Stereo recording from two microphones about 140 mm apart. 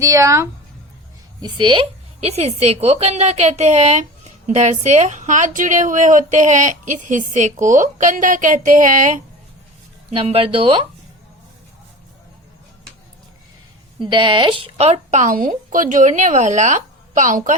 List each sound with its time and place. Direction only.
0.0 s speech: 20° right (ahead or behind)
1.4 s a woman's voice: 30° right (ahead or behind); by 9.2 s 65° right (ahead or behind)
10.1 s a woman's voice: 45° right (ahead or behind)
14.0 s a woman's voice: 35° right (ahead or behind); by 17.6 s 65° right (ahead or behind)